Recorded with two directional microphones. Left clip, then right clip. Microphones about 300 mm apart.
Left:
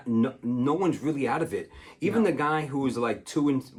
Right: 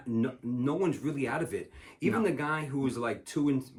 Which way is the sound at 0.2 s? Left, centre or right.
Centre.